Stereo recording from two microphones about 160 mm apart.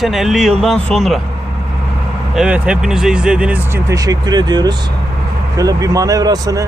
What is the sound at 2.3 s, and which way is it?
Speech, 5° right (ahead or behind).